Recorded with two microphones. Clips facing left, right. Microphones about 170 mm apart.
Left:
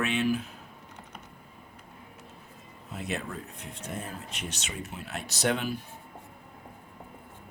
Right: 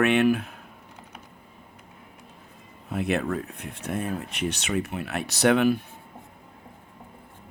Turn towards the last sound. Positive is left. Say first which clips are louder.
# right 9 dB
turn(degrees=-65)  # may be behind; listen again after turning